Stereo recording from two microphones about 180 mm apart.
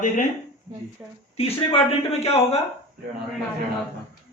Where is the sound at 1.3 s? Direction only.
30° left (ahead or behind).